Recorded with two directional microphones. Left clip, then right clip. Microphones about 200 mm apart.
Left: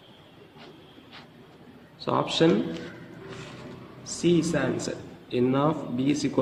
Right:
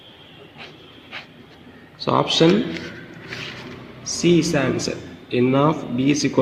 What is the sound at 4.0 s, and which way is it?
Speech, 15° right (ahead or behind).